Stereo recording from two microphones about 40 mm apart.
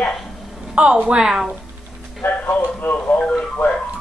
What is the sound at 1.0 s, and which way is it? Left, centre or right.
Speech, centre.